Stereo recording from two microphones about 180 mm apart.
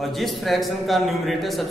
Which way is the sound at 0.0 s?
Centre (ahead or behind).